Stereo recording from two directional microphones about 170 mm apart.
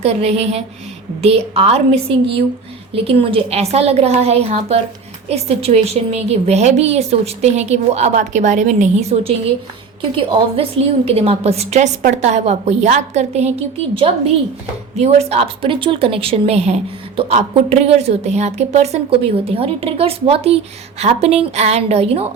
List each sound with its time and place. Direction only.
0.0 s a woman's voice: 40° right (ahead or behind)
14.9 s a woman's voice: 40° right (ahead or behind)